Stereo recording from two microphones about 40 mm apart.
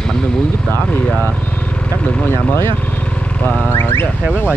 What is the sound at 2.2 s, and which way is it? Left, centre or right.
Speech, left.